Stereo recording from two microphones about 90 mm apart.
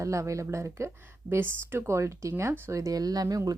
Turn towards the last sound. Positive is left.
turn(degrees=-40)  # may be behind; listen again after turning